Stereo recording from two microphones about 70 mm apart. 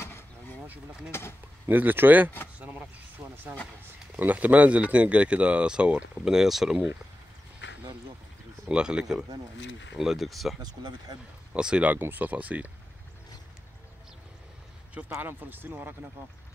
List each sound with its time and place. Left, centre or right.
0.0 s vehicle: left
1.7 s speech: right; by 6.9 s centre
8.6 s speech: centre
10.6 s speech: right
11.5 s speech: centre
15.0 s speech: right